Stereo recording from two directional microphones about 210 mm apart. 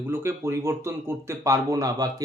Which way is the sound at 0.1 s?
10° right (ahead or behind).